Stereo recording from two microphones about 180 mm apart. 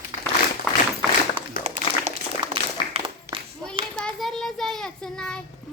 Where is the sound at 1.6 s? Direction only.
40° right (ahead or behind).